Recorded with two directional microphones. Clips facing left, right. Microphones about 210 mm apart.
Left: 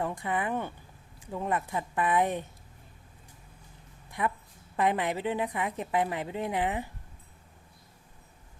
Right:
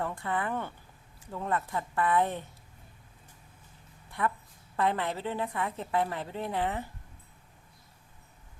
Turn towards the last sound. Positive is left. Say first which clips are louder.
# left 2 dB
turn(degrees=15)  # may be behind; listen again after turning